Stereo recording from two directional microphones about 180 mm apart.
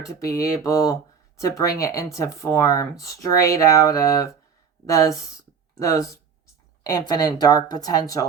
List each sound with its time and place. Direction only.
0.1 s speech: 15° left (ahead or behind)
7.1 s speech: 20° left (ahead or behind)